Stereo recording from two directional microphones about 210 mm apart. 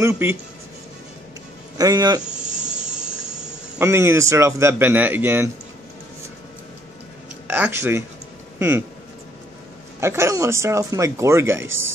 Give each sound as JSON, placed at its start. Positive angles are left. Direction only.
{"t": 0.0, "sound": "speech", "side_deg": -10}
{"t": 1.8, "sound": "speech", "side_deg": -20}
{"t": 2.6, "sound": "a sound", "side_deg": -5}
{"t": 7.4, "sound": "speech", "side_deg": -10}
{"t": 9.9, "sound": "speech", "side_deg": -10}